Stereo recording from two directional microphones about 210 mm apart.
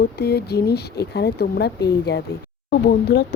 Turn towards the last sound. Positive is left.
turn(degrees=50)  # may be behind; listen again after turning